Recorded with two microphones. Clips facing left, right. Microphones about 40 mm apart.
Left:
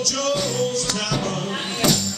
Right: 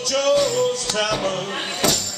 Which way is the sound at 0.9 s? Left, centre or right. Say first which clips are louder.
Right 3 dB; right.